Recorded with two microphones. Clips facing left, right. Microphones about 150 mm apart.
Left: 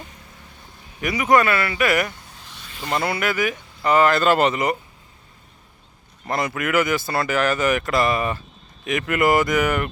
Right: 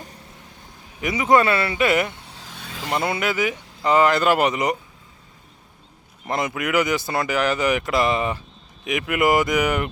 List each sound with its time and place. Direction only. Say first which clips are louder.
1.0 s speech: even; 20° right (ahead or behind)
6.2 s speech: even; 20° right (ahead or behind)